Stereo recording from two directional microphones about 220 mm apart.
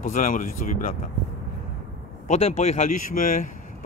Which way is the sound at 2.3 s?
30° left (ahead or behind).